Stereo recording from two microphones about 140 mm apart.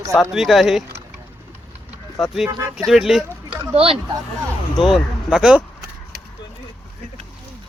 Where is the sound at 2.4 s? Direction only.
25° right (ahead or behind).